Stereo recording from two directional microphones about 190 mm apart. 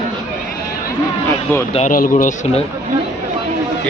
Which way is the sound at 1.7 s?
45° left (ahead or behind).